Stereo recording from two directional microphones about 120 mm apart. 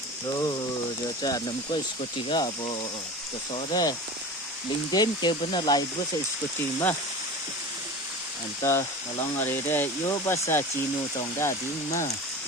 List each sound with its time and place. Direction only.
1.2 s speech: 35° left (ahead or behind)
8.6 s speech: 20° left (ahead or behind)